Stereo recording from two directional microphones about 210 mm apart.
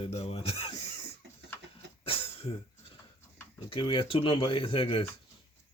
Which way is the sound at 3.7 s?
25° left (ahead or behind).